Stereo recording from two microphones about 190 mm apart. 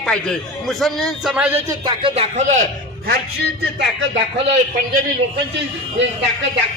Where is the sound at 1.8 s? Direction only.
30° right (ahead or behind).